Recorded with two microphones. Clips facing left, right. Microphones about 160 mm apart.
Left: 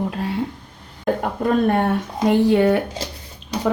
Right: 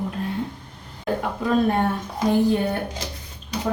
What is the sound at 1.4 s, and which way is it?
Speech, 55° left (ahead or behind).